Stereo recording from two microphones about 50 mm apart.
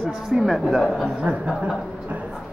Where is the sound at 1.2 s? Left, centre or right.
Right.